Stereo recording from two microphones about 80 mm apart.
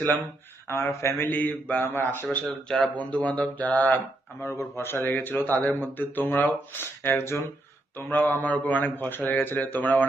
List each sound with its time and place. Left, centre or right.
0.7 s speech: left
2.5 s speech: centre
3.0 s speech: centre